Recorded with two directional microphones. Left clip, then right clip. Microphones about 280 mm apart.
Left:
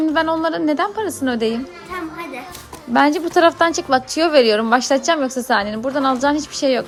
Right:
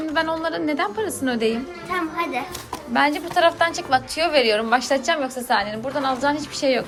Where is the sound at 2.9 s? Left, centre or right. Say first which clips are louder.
Left 5 dB; centre.